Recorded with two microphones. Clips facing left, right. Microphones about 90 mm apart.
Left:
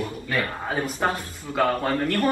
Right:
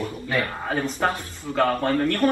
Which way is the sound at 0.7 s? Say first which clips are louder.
Right 1 dB; 15° left (ahead or behind).